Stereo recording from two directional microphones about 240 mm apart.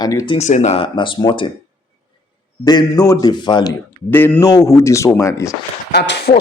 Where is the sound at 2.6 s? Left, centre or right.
Centre.